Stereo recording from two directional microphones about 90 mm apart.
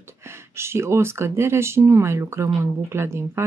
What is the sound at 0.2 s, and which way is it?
Speech, 30° right (ahead or behind).